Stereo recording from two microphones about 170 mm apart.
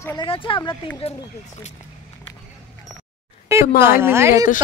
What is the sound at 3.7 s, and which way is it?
Speech, 15° right (ahead or behind).